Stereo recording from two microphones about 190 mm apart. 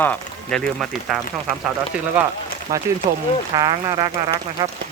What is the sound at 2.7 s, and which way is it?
Speech, 20° right (ahead or behind).